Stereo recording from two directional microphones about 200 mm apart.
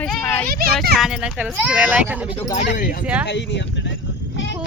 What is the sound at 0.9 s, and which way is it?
Speech, centre (ahead or behind).